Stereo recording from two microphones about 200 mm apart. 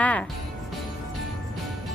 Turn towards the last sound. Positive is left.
turn(degrees=5)  # may be behind; listen again after turning